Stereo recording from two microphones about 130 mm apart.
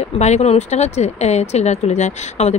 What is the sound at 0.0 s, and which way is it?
Speech, 60° left (ahead or behind).